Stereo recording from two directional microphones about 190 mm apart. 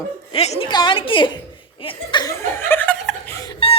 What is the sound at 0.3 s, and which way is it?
A woman's voice, 35° left (ahead or behind).